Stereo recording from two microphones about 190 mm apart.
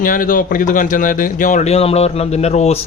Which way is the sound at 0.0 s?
45° left (ahead or behind).